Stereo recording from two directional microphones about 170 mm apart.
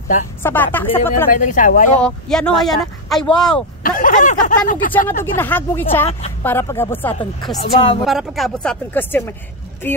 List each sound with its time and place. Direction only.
0.4 s speech: 10° left (ahead or behind)
1.3 s speech: 50° left (ahead or behind)
2.0 s speech: 5° left (ahead or behind)
3.8 s speech: 50° left (ahead or behind)
4.9 s speech: 10° left (ahead or behind)
7.6 s a woman's voice: 30° left (ahead or behind)
8.0 s speech: centre (ahead or behind)